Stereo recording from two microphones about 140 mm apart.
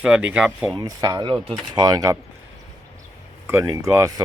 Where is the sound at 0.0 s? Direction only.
10° right (ahead or behind).